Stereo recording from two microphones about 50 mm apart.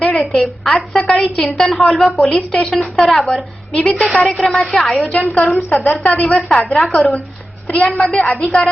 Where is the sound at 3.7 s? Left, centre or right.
Left.